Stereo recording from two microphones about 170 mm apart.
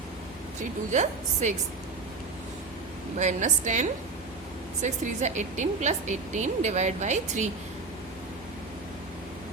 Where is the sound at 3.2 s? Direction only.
45° right (ahead or behind).